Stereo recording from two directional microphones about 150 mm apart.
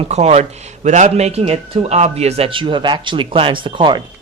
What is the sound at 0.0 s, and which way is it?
Speech, 45° right (ahead or behind).